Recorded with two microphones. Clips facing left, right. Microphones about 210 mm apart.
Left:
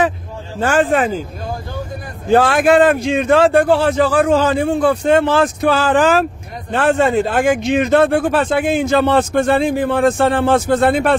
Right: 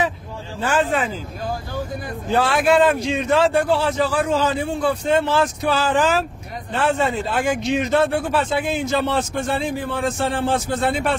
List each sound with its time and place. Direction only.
0.7 s a man's voice: 50° left (ahead or behind)
2.3 s a man's voice: 50° left (ahead or behind)